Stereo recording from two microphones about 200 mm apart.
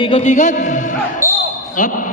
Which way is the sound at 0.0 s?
30° left (ahead or behind).